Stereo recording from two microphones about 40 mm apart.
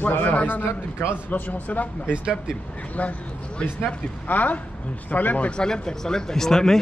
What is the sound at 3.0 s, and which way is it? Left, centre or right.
Speech, left.